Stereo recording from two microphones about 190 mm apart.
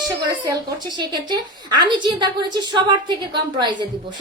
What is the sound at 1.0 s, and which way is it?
A child's voice, 25° right (ahead or behind).